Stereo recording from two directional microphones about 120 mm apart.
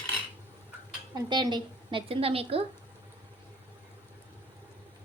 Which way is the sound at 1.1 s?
35° right (ahead or behind).